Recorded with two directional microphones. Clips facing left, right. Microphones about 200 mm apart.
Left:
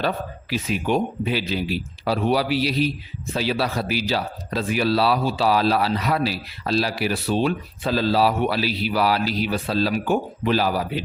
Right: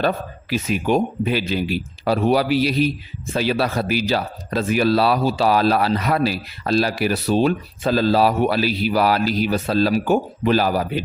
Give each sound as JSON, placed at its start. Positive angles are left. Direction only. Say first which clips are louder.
{"t": 0.5, "sound": "speech", "louder": "right 3 dB", "side_deg": -45}